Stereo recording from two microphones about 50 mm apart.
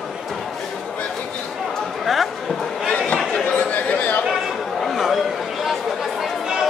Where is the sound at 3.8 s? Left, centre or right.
Left.